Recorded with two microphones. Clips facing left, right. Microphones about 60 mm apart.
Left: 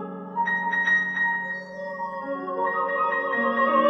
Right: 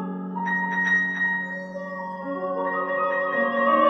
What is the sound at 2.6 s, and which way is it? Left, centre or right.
Music, centre.